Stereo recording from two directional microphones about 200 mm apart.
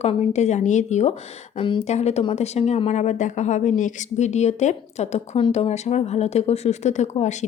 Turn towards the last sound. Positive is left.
turn(degrees=35)  # may be behind; listen again after turning